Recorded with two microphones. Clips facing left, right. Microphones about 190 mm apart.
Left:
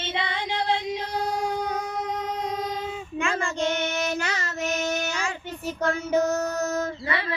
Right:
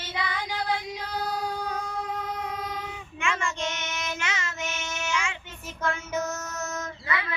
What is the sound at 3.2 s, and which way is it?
Child singing, 35° left (ahead or behind).